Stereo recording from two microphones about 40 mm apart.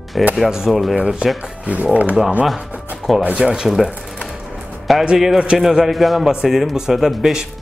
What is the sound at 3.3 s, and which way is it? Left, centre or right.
Speech, right.